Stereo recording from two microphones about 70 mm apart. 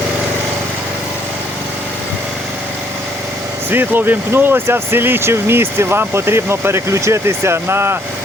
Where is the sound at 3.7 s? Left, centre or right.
Right.